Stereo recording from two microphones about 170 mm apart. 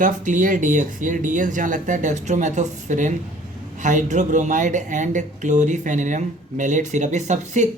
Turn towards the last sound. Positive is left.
turn(degrees=-45)  # may be behind; listen again after turning